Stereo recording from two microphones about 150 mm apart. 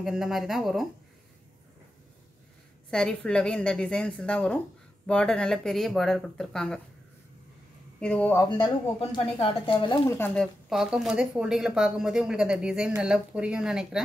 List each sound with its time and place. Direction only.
0.0 s speech: centre (ahead or behind)
2.9 s speech: 5° left (ahead or behind)
8.0 s speech: 10° left (ahead or behind)
8.4 s speech: 30° left (ahead or behind)
10.0 s speech: 15° left (ahead or behind); by 14.0 s 5° right (ahead or behind)